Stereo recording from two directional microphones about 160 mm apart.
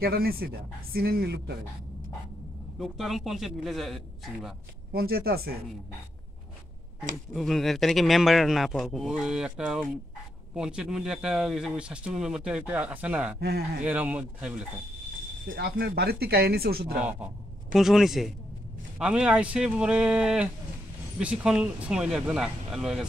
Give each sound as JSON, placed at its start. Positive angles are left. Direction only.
{"t": 0.0, "sound": "speech", "side_deg": -70}
{"t": 2.8, "sound": "speech", "side_deg": 0}
{"t": 4.9, "sound": "speech", "side_deg": -75}
{"t": 7.3, "sound": "speech", "side_deg": 0}
{"t": 15.4, "sound": "speech", "side_deg": -65}
{"t": 17.7, "sound": "speech", "side_deg": 0}